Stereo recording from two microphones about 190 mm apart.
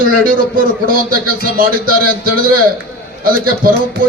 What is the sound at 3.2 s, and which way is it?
Speech, 50° right (ahead or behind).